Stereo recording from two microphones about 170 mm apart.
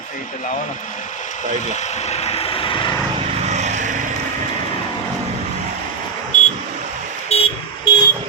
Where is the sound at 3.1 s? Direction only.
40° right (ahead or behind).